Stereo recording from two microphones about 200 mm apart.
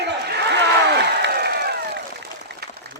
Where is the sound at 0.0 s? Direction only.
55° right (ahead or behind).